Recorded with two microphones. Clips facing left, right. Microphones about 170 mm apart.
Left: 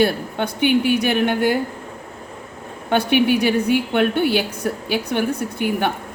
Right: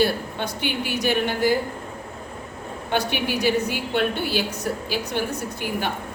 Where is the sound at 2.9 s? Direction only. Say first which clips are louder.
Left 8 dB; 60° left (ahead or behind).